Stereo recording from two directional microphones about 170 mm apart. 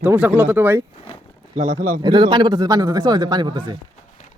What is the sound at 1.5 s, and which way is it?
Speech, 55° right (ahead or behind).